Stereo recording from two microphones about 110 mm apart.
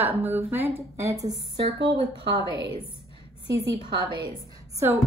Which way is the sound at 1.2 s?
65° right (ahead or behind).